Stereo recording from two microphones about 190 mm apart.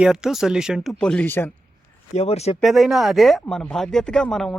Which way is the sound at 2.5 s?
Centre (ahead or behind).